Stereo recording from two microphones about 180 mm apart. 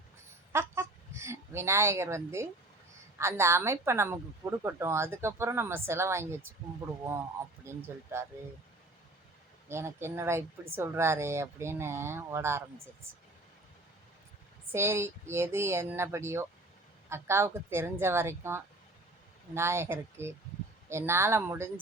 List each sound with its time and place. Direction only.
0.5 s a sound: 15° right (ahead or behind)
3.2 s speech: 15° right (ahead or behind)
8.1 s speech: 15° right (ahead or behind)
9.6 s speech: 15° right (ahead or behind)
14.7 s speech: 15° right (ahead or behind)